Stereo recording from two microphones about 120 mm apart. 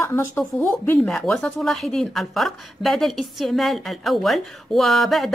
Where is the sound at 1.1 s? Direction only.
5° left (ahead or behind).